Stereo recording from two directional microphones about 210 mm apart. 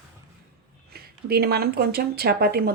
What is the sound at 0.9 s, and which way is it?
Speech, 45° right (ahead or behind).